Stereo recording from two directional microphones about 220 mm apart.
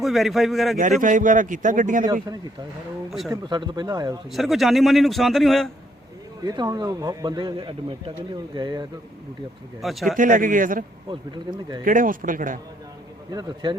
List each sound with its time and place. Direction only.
0.0 s a man's voice: centre (ahead or behind)
0.8 s a man's voice: 35° right (ahead or behind)
3.1 s a man's voice: centre (ahead or behind)
3.4 s speech: 20° right (ahead or behind)
4.3 s a man's voice: centre (ahead or behind)
6.4 s speech: 15° right (ahead or behind)
9.8 s a man's voice: centre (ahead or behind)
10.2 s a man's voice: 35° right (ahead or behind)
11.1 s speech: 20° right (ahead or behind)
11.9 s a man's voice: 35° right (ahead or behind)
13.3 s speech: 20° right (ahead or behind)